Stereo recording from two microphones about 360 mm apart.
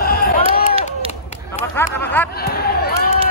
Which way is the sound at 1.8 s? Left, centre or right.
Centre.